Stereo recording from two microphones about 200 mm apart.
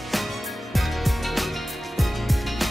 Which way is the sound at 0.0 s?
Centre (ahead or behind).